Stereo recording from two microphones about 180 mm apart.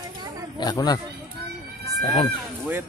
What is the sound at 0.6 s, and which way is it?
Speech, 20° left (ahead or behind).